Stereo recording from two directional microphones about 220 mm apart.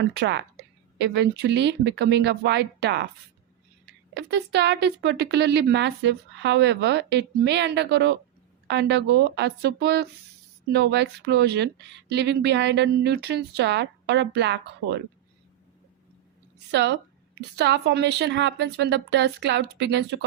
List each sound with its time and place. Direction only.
0.0 s speech: 50° right (ahead or behind)
4.1 s speech: 50° right (ahead or behind)
16.7 s speech: 50° right (ahead or behind)